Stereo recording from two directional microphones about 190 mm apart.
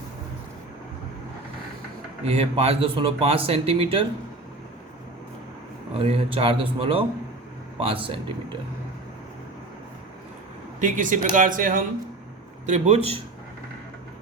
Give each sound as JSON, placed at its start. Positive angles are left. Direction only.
{"t": 2.2, "sound": "speech", "side_deg": -30}
{"t": 6.0, "sound": "speech", "side_deg": -30}
{"t": 10.8, "sound": "speech", "side_deg": -40}